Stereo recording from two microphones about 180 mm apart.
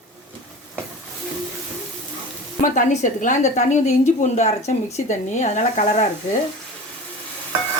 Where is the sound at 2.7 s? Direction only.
45° left (ahead or behind).